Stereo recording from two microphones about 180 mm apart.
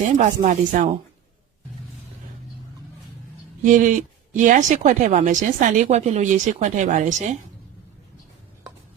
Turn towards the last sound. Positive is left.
turn(degrees=-40)  # may be behind; listen again after turning